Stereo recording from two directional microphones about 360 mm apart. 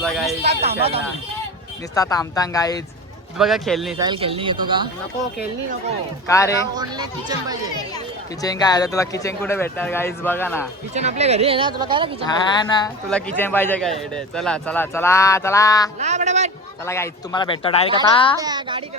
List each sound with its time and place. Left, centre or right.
0.0 s speech: centre
0.4 s speech: centre
2.0 s speech: centre
3.3 s speech: centre
4.0 s speech: centre
6.2 s speech: centre
6.7 s speech: centre
7.9 s speech: centre
10.9 s speech: centre
12.5 s speech: centre
16.0 s a man's voice: centre
16.8 s speech: centre
18.3 s speech: centre